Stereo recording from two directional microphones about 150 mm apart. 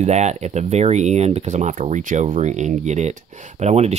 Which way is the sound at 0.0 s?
50° right (ahead or behind).